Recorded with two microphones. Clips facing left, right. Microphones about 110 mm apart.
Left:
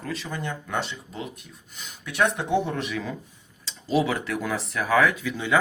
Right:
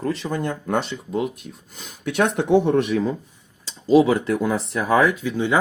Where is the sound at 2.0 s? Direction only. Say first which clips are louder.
Right 3 dB; 70° right (ahead or behind).